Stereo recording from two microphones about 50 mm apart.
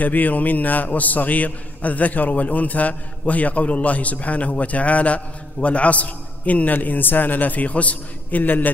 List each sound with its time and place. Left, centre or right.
0.0 s a man's voice: left